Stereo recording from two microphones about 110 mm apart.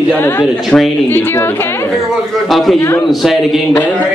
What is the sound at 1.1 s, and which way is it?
Speech, 20° left (ahead or behind).